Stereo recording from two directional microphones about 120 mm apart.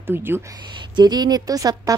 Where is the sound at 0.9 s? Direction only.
35° right (ahead or behind).